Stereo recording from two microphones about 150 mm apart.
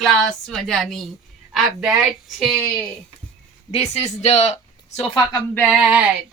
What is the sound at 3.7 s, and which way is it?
Speech, 45° left (ahead or behind).